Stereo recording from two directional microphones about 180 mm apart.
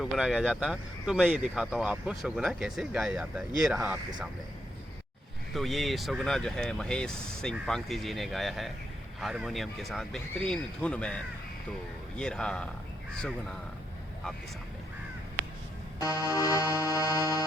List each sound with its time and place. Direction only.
0.0 s speech: centre (ahead or behind)
5.5 s speech: centre (ahead or behind)
16.0 s music: 20° left (ahead or behind)